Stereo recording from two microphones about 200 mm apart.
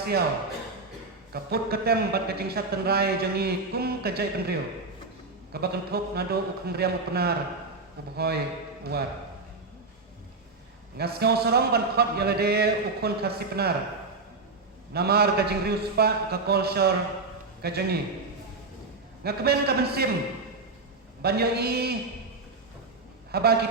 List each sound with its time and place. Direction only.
1.3 s a man's voice: 50° right (ahead or behind)
10.9 s a man's voice: 50° right (ahead or behind)
14.9 s a man's voice: 50° right (ahead or behind)
19.2 s a man's voice: 50° right (ahead or behind)
21.2 s a man's voice: 50° right (ahead or behind)
23.3 s a man's voice: 50° right (ahead or behind)